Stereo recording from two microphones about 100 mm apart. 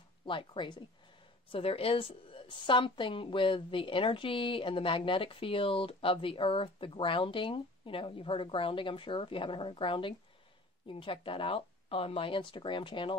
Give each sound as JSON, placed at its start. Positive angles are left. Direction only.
{"t": 0.2, "sound": "a woman's voice", "side_deg": 60}
{"t": 1.5, "sound": "a woman's voice", "side_deg": 75}